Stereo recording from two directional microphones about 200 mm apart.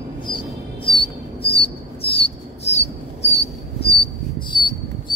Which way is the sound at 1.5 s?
30° left (ahead or behind).